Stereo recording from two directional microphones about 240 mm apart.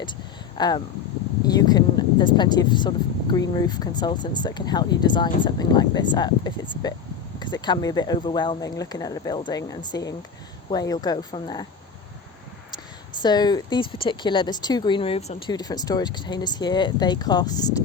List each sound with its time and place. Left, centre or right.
0.5 s speech: centre
13.2 s speech: centre